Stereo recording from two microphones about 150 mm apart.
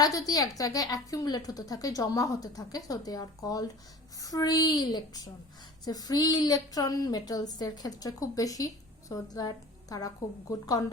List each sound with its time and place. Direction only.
0.0 s a woman's voice: 25° left (ahead or behind)